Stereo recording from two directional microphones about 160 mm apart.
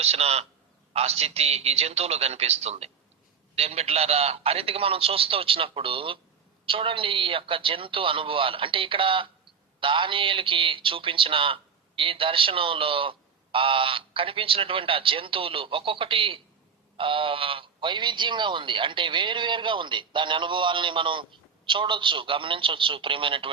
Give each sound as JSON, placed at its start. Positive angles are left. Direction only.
{"t": 0.0, "sound": "a man's voice", "side_deg": -40}